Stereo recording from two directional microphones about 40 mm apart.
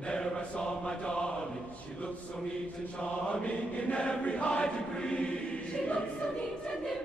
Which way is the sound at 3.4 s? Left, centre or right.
Left.